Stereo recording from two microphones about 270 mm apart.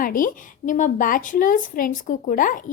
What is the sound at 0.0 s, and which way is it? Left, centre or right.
Speech, left.